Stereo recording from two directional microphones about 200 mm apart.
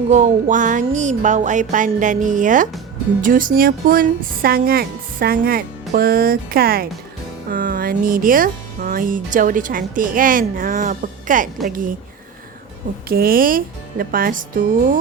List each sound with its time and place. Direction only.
0.1 s music: 35° right (ahead or behind)
3.2 s speech: 40° right (ahead or behind)
13.1 s speech: 45° right (ahead or behind)